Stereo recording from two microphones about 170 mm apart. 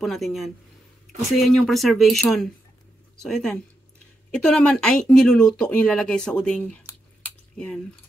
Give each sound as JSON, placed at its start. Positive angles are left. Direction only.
{"t": 0.0, "sound": "speech", "side_deg": 0}
{"t": 7.2, "sound": "drip", "side_deg": 5}